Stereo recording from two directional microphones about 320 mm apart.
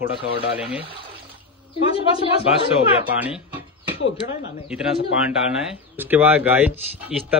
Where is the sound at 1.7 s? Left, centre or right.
Centre.